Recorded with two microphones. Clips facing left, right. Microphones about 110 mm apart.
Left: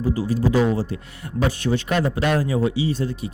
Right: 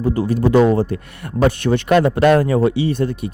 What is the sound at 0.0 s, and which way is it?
A man's voice, 60° right (ahead or behind).